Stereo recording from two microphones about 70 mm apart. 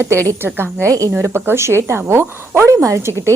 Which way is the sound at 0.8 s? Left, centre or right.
Right.